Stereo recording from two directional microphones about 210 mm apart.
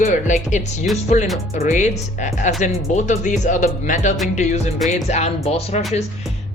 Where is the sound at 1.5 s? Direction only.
35° left (ahead or behind).